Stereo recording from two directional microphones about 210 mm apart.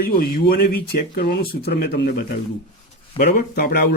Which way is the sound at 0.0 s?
45° left (ahead or behind).